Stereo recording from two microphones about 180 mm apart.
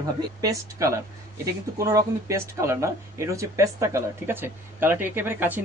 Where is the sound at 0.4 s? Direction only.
20° right (ahead or behind).